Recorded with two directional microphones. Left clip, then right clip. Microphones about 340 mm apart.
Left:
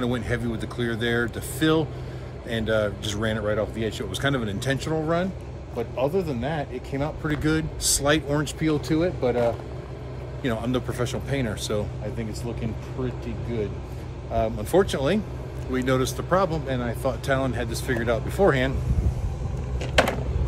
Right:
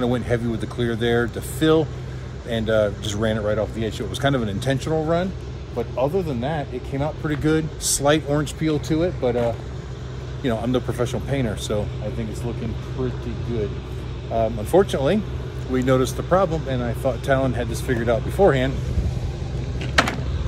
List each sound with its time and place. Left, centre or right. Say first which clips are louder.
0.0 s speech: right 5 dB; centre
14.3 s speech: right 3 dB; centre
19.8 s typing: right 1 dB; left